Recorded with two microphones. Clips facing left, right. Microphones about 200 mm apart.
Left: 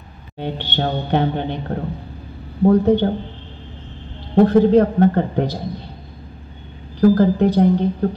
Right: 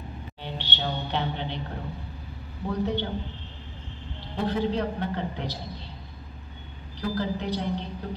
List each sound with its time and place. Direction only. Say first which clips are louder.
0.4 s a woman's voice: left 11 dB; 50° left (ahead or behind)
4.5 s a woman's voice: left 10 dB; 50° left (ahead or behind)
7.0 s a woman's voice: left 16 dB; 50° left (ahead or behind)